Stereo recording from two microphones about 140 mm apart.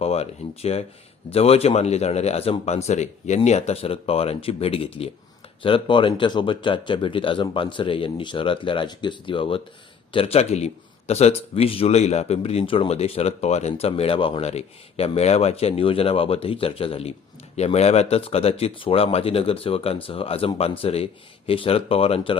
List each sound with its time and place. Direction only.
0.0 s speech: 45° left (ahead or behind)